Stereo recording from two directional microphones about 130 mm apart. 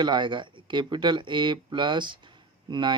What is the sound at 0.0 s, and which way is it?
Speech, 35° right (ahead or behind).